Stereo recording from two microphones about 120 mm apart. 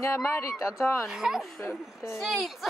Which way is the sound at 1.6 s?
20° left (ahead or behind).